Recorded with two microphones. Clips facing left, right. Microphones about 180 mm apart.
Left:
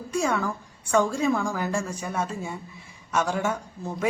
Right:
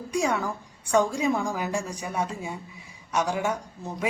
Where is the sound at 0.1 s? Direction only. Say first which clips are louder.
Left 1 dB; 15° right (ahead or behind).